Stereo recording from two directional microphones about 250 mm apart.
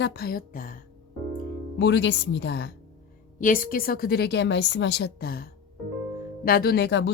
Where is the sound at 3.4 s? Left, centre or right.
Left.